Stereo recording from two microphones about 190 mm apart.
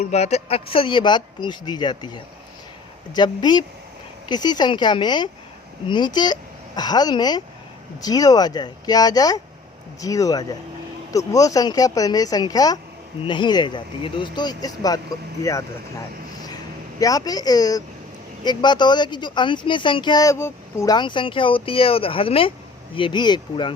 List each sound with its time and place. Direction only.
0.0 s speech: 35° left (ahead or behind)
17.0 s speech: 20° left (ahead or behind)